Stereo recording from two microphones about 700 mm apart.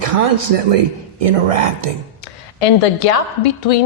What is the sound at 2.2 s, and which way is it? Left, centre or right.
A woman's voice, left.